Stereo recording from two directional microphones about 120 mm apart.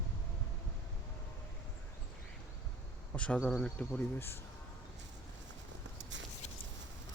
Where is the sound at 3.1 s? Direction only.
10° left (ahead or behind).